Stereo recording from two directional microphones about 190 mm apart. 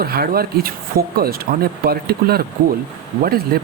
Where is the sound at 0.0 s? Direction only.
55° right (ahead or behind).